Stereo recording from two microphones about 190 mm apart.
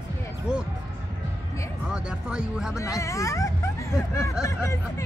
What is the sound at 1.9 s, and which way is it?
Speech, 5° right (ahead or behind).